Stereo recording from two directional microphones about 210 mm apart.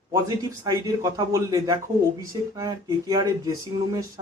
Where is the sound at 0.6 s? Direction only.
15° right (ahead or behind).